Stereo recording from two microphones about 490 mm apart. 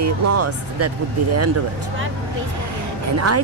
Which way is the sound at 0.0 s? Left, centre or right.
Right.